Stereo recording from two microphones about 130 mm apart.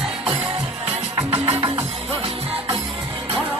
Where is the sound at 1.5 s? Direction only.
45° right (ahead or behind).